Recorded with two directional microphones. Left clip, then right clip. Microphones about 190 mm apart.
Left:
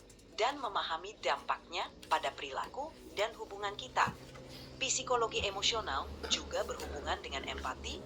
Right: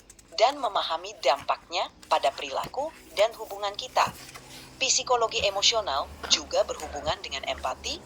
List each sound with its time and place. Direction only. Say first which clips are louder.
0.3 s a woman's voice: right 10 dB; 35° right (ahead or behind)